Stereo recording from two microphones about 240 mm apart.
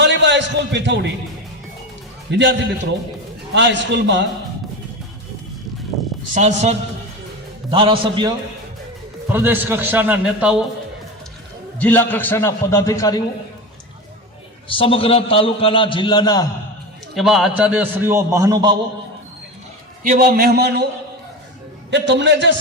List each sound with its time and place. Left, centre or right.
0.0 s a sound: right
2.3 s a man's voice: right
6.3 s a man's voice: right
9.3 s a man's voice: centre
11.8 s a man's voice: centre
14.7 s a man's voice: left
17.2 s a man's voice: centre
20.1 s a man's voice: right
21.8 s a man's voice: right